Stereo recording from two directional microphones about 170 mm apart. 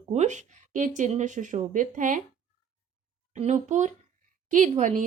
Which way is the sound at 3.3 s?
40° right (ahead or behind).